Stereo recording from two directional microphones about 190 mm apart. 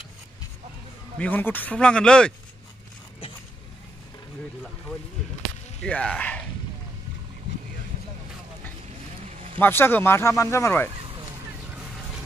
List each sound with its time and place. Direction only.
1.1 s speech: 5° left (ahead or behind)
5.8 s speech: 5° left (ahead or behind)
9.6 s speech: 10° left (ahead or behind)
11.7 s vehicle: 5° right (ahead or behind)